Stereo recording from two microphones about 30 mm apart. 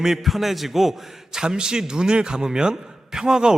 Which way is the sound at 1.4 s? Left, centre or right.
Right.